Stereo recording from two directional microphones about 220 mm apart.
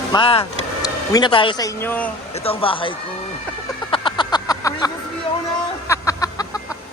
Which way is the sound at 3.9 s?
20° left (ahead or behind).